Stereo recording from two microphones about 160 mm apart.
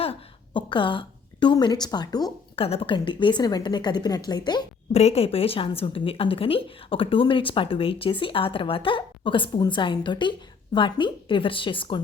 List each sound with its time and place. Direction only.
0.0 s a woman's voice: 35° left (ahead or behind)
2.6 s a woman's voice: 35° left (ahead or behind)
4.9 s a woman's voice: 40° left (ahead or behind)